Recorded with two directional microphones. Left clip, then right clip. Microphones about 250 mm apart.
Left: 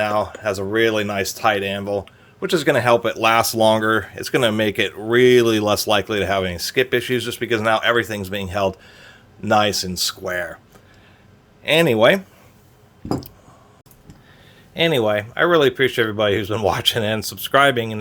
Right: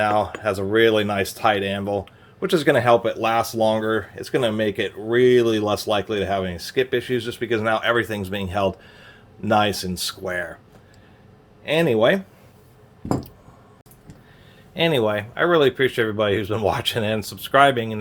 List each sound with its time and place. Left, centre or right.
0.0 s speech: centre
11.6 s speech: left
14.7 s speech: centre